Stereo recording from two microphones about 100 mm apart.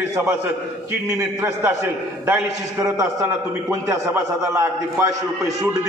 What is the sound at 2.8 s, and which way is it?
A man's voice, 35° right (ahead or behind).